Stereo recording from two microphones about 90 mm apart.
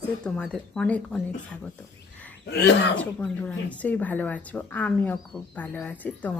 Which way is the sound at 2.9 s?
15° left (ahead or behind).